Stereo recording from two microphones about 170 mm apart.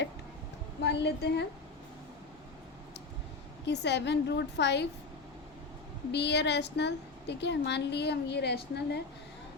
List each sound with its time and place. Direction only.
0.8 s a woman's voice: 80° left
3.7 s a woman's voice: 90° left
6.1 s a woman's voice: 85° left